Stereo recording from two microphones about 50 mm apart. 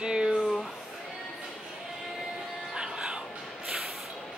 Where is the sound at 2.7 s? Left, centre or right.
Centre.